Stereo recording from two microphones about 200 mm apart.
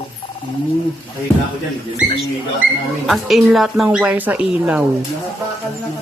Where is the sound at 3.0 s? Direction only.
Centre (ahead or behind).